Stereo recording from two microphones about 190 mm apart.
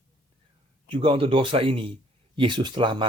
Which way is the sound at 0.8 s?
30° right (ahead or behind).